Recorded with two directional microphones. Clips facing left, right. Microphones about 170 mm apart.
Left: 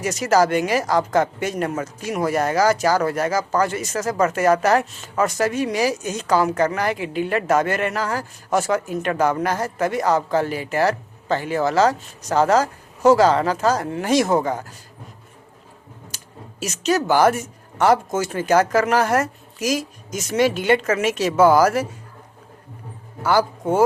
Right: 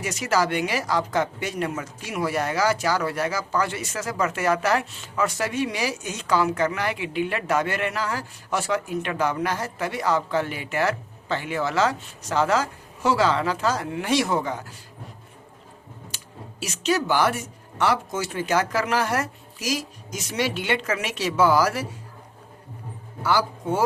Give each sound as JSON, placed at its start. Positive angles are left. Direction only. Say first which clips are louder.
{"t": 0.0, "sound": "speech", "louder": "left 6 dB", "side_deg": 40}
{"t": 16.1, "sound": "speech", "louder": "left 2 dB", "side_deg": 45}
{"t": 23.2, "sound": "speech", "louder": "left 4 dB", "side_deg": 50}